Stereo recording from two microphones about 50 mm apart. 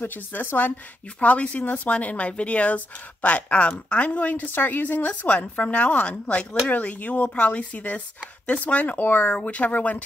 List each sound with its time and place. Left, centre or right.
0.0 s speech: left
1.2 s speech: left